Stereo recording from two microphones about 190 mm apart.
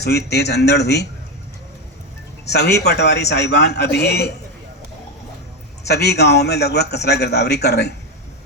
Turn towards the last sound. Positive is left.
turn(degrees=60)  # may be behind; listen again after turning